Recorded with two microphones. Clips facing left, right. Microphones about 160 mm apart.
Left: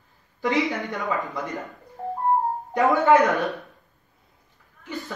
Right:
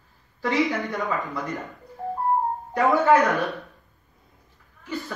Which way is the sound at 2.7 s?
20° left (ahead or behind).